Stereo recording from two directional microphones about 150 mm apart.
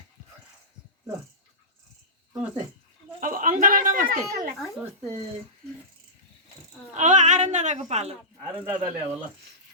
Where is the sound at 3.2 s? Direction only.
60° right (ahead or behind).